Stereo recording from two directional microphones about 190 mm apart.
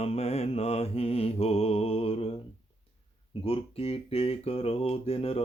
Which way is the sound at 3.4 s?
30° left (ahead or behind).